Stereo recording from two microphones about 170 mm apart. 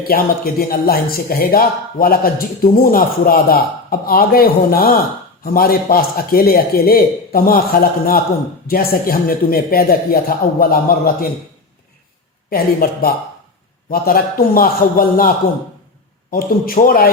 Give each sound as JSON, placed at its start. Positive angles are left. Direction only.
{"t": 0.1, "sound": "speech", "side_deg": 60}
{"t": 12.5, "sound": "speech", "side_deg": 60}
{"t": 16.3, "sound": "speech", "side_deg": 60}